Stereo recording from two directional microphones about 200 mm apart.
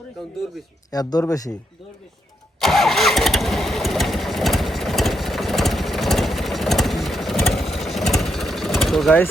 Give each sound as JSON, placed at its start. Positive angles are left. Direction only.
{"t": 0.9, "sound": "speech", "side_deg": 20}
{"t": 2.6, "sound": "engine starting", "side_deg": 0}